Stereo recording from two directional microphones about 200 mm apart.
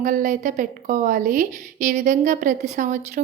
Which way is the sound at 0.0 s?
40° right (ahead or behind).